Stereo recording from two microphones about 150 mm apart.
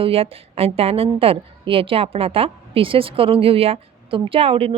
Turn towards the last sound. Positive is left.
turn(degrees=-40)  # may be behind; listen again after turning